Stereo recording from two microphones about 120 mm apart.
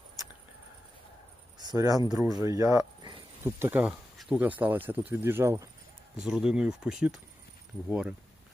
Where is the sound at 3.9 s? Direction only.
5° right (ahead or behind).